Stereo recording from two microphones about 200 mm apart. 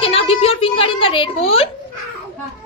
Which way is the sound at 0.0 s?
30° left (ahead or behind).